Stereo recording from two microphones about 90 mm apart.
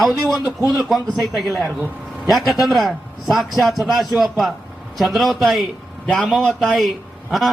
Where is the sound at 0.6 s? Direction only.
Centre (ahead or behind).